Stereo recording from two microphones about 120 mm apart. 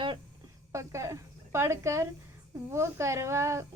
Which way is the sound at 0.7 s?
25° right (ahead or behind).